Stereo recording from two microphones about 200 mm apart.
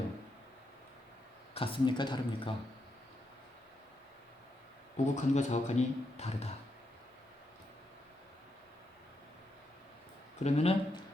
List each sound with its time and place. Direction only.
1.5 s speech: 25° left (ahead or behind)
4.9 s speech: 35° left (ahead or behind)
10.4 s speech: 30° left (ahead or behind)